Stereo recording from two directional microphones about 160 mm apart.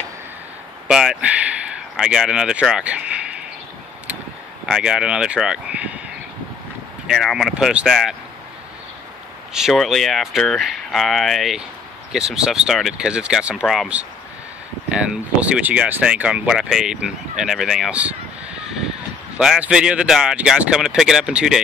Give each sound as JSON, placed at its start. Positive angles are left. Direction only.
{"t": 0.8, "sound": "speech", "side_deg": -5}
{"t": 4.6, "sound": "speech", "side_deg": -5}
{"t": 7.1, "sound": "speech", "side_deg": 0}
{"t": 9.5, "sound": "speech", "side_deg": -5}
{"t": 19.3, "sound": "speech", "side_deg": -5}